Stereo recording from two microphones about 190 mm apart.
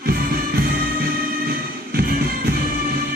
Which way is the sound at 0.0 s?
50° right (ahead or behind).